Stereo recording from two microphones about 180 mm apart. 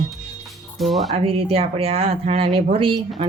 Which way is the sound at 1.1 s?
30° right (ahead or behind).